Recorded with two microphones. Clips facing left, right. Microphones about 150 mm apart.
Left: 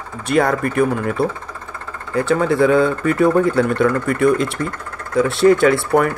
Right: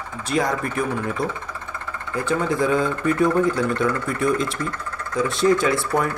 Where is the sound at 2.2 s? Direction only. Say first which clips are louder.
Left 6 dB; 70° left (ahead or behind).